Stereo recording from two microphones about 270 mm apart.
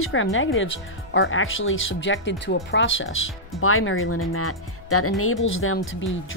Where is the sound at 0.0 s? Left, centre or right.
Left.